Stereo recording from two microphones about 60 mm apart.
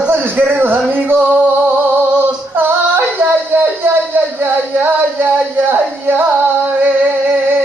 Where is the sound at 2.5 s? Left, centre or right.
Right.